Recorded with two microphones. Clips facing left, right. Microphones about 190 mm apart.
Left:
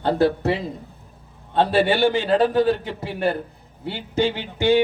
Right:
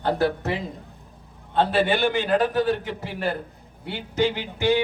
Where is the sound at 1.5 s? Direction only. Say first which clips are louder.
Left 3 dB; 30° left (ahead or behind).